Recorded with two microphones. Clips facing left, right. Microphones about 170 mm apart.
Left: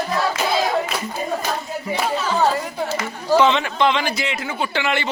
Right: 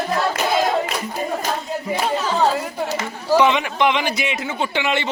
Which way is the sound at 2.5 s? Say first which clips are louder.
Even; 10° right (ahead or behind).